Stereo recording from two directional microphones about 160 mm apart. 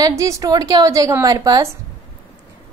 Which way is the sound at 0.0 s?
20° right (ahead or behind).